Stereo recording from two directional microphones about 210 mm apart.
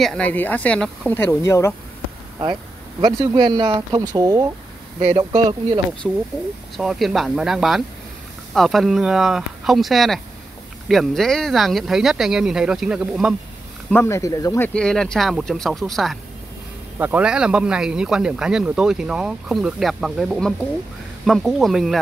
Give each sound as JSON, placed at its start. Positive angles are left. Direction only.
{"t": 0.0, "sound": "speech", "side_deg": 5}
{"t": 3.0, "sound": "speech", "side_deg": -15}
{"t": 5.0, "sound": "speech", "side_deg": -30}
{"t": 6.0, "sound": "speech", "side_deg": 0}
{"t": 13.8, "sound": "speech", "side_deg": 10}